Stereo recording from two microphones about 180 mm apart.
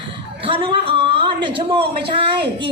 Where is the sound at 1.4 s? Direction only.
30° right (ahead or behind).